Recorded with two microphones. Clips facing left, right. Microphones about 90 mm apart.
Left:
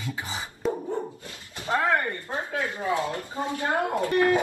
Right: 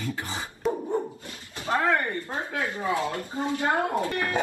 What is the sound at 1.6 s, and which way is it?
Speech, 20° left (ahead or behind).